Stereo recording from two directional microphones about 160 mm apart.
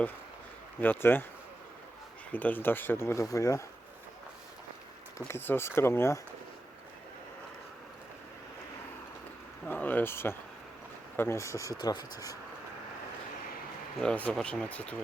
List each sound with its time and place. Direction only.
0.8 s speech: 10° left (ahead or behind)
2.3 s speech: 10° left (ahead or behind)
5.1 s speech: 15° left (ahead or behind)
9.6 s speech: 10° left (ahead or behind)
14.0 s speech: 10° left (ahead or behind)